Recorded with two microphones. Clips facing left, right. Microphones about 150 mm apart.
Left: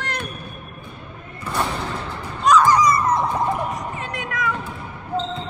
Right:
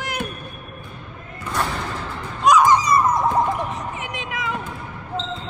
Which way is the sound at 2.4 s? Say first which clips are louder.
Right 1 dB; 10° right (ahead or behind).